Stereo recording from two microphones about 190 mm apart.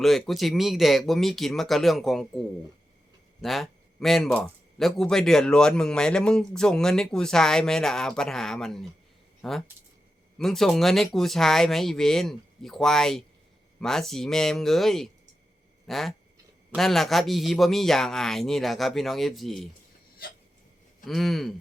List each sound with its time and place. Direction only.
0.0 s speech: centre (ahead or behind)
3.4 s speech: centre (ahead or behind)
20.2 s hiccup: 50° left (ahead or behind)
21.0 s speech: centre (ahead or behind)